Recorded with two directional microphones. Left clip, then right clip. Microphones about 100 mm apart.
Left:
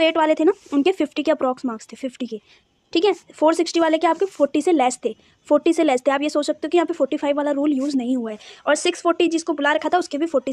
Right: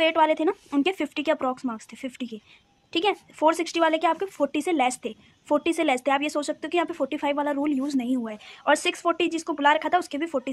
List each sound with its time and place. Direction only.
0.0 s speech: 40° left (ahead or behind)
0.7 s speech: 30° left (ahead or behind)